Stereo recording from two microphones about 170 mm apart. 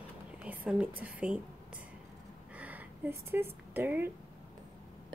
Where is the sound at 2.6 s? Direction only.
10° right (ahead or behind).